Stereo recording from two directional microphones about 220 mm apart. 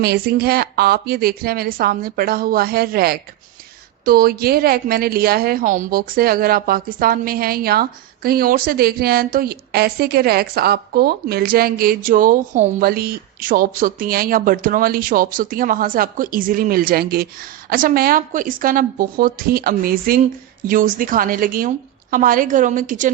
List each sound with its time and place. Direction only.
0.0 s a woman's voice: 45° right (ahead or behind)